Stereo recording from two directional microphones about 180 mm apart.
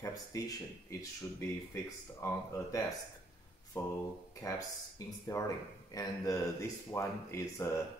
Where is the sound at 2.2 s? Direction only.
15° left (ahead or behind).